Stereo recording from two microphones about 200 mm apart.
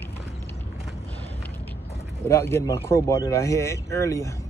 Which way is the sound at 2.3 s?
10° left (ahead or behind).